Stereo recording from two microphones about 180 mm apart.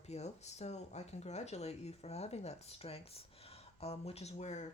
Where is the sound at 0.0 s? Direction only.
35° left (ahead or behind).